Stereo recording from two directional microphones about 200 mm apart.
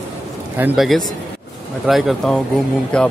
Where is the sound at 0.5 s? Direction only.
5° right (ahead or behind).